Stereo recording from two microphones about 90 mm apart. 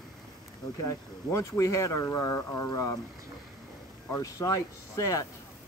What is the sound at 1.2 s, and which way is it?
Speech, 35° left (ahead or behind).